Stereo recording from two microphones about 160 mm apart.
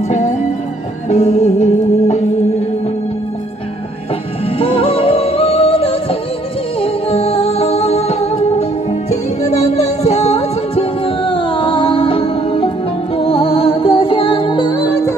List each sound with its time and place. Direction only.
0.1 s music: 45° left (ahead or behind)
4.6 s music: 35° left (ahead or behind)